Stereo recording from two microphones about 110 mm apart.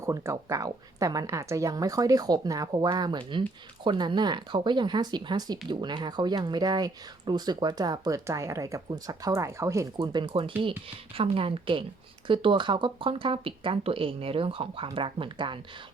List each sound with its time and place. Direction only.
0.0 s speech: 25° right (ahead or behind)
10.0 s speech: 45° right (ahead or behind)